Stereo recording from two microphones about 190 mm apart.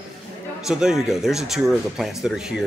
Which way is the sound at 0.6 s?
5° right (ahead or behind).